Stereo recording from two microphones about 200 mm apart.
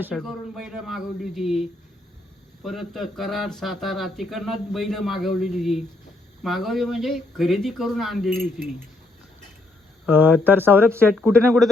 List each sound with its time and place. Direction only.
0.0 s speech: centre (ahead or behind)
2.6 s speech: centre (ahead or behind)
10.1 s speech: 10° right (ahead or behind)